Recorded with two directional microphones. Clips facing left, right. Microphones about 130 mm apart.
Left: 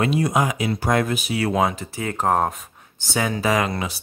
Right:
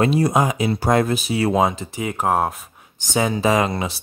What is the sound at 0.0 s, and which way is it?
Speech, 35° right (ahead or behind).